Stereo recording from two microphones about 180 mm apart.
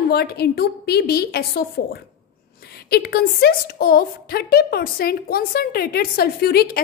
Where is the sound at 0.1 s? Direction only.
60° left (ahead or behind).